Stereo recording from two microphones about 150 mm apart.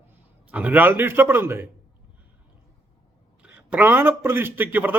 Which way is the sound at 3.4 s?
10° right (ahead or behind).